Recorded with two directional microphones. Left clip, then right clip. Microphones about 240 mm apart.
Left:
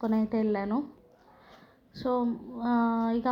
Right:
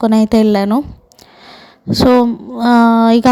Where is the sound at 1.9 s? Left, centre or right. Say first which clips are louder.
Right 19 dB; right.